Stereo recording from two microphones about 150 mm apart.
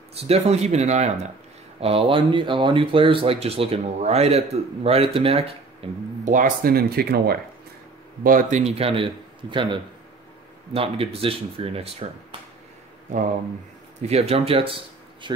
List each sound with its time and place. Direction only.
0.1 s speech: 45° right (ahead or behind)
6.2 s speech: 60° right (ahead or behind); by 7.4 s 90° right
8.2 s speech: 65° right (ahead or behind); by 12.4 s 40° right (ahead or behind)
13.1 s speech: 55° right (ahead or behind)
14.0 s speech: 45° right (ahead or behind)